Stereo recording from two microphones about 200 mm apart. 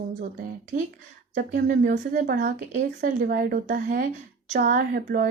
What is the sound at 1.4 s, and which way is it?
A woman's voice, 40° right (ahead or behind).